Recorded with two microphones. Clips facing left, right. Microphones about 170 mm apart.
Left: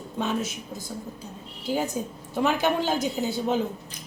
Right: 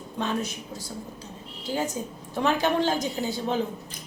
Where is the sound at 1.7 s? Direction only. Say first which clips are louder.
Left 2 dB; 15° left (ahead or behind).